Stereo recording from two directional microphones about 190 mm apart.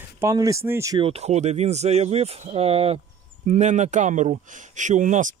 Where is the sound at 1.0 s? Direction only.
30° right (ahead or behind).